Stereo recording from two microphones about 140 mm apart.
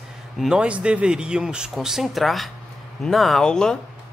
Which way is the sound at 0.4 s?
5° right (ahead or behind).